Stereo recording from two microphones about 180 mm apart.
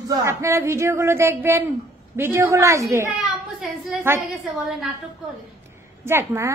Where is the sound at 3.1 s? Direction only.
Centre (ahead or behind).